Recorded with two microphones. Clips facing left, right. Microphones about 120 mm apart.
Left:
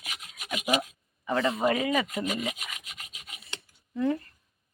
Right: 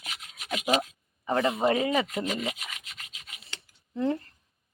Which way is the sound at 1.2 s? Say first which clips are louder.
Right 1 dB; 30° right (ahead or behind).